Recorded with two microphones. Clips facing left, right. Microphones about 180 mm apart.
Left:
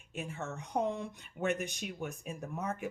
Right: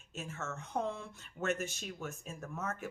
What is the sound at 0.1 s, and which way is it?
Speech, 15° left (ahead or behind).